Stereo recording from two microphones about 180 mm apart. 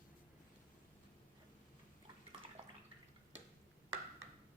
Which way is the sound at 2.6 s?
35° right (ahead or behind).